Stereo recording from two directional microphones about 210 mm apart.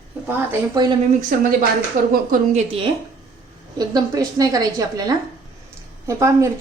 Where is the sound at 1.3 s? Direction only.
40° right (ahead or behind).